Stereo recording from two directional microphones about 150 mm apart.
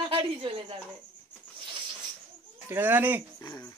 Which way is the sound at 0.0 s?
35° right (ahead or behind).